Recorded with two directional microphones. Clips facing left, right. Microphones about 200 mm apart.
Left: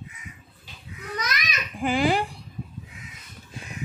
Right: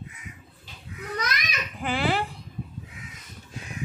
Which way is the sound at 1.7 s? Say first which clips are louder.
Left 4 dB; 15° left (ahead or behind).